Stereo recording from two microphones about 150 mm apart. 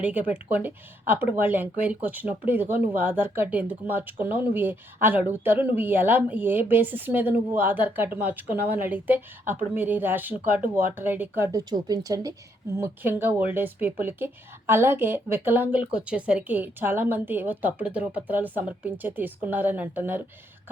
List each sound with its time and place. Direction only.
0.0 s speech: 10° right (ahead or behind)